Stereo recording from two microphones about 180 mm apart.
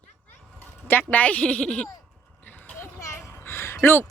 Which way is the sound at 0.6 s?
10° left (ahead or behind).